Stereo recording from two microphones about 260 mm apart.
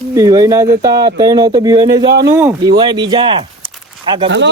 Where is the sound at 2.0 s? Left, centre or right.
Right.